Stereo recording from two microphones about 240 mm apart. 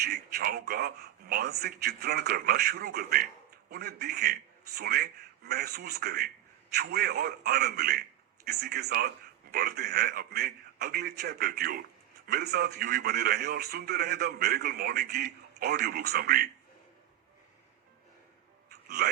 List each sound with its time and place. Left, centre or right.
0.0 s a man's voice: right
18.7 s music: right